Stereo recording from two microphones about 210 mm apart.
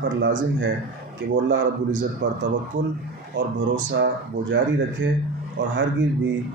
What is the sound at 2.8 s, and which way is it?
Speech, 35° right (ahead or behind).